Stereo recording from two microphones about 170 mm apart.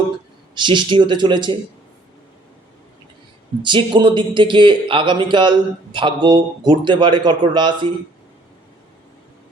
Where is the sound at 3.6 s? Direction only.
30° right (ahead or behind).